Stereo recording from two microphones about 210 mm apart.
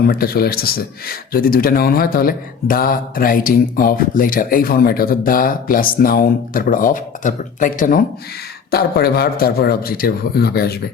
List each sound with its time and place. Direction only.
0.1 s speech: 45° left (ahead or behind)